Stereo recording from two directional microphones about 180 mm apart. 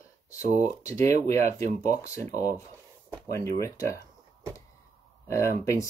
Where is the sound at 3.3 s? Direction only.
15° left (ahead or behind).